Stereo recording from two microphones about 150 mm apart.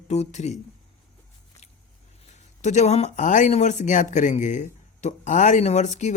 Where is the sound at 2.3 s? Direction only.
50° left (ahead or behind).